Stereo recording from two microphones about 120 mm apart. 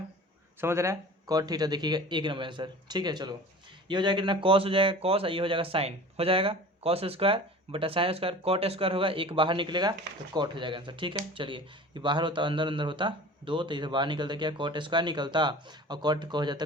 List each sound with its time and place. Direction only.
0.6 s speech: 20° right (ahead or behind); by 16.6 s 40° right (ahead or behind)